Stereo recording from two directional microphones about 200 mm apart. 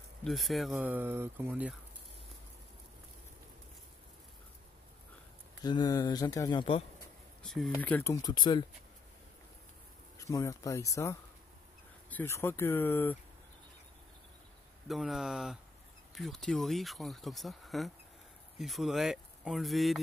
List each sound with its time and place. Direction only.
0.2 s speech: centre (ahead or behind)
5.6 s speech: 20° left (ahead or behind)
7.4 s speech: centre (ahead or behind); by 8.6 s 25° left (ahead or behind)
10.1 s speech: 15° left (ahead or behind)
14.9 s speech: centre (ahead or behind)